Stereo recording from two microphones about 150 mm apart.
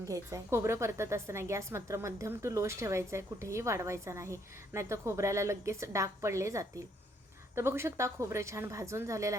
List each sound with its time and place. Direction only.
0.0 s a woman's voice: 20° right (ahead or behind)